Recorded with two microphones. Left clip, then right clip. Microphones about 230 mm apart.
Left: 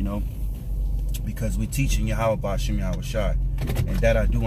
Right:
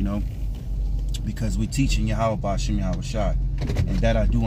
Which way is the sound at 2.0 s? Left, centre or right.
Centre.